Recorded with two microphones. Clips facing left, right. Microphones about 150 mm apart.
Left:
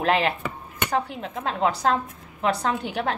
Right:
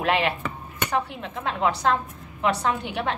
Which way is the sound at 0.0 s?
35° left (ahead or behind).